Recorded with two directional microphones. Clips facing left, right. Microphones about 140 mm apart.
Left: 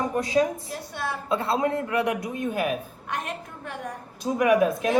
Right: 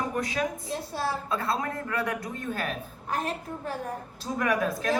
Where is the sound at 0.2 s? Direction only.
25° left (ahead or behind).